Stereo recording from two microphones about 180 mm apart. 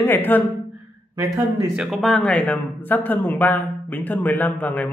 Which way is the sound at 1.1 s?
15° right (ahead or behind).